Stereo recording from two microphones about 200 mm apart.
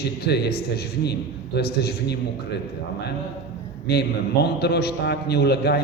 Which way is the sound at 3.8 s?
55° left (ahead or behind).